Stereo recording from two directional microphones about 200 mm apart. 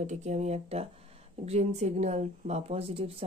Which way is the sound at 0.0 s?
35° right (ahead or behind).